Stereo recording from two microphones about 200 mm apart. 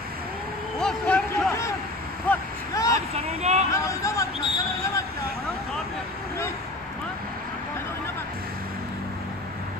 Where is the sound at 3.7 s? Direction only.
15° left (ahead or behind).